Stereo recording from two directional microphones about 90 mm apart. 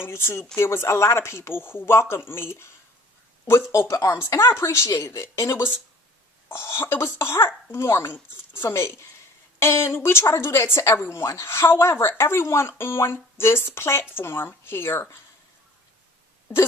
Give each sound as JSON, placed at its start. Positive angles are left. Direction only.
{"t": 0.0, "sound": "speech", "side_deg": 30}
{"t": 3.7, "sound": "speech", "side_deg": 35}